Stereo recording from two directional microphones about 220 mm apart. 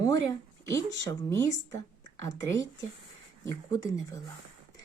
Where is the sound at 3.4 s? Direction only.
15° left (ahead or behind).